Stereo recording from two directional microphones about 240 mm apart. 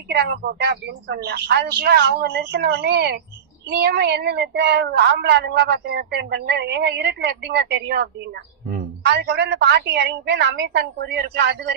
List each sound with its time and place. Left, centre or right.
0.1 s a woman's voice: right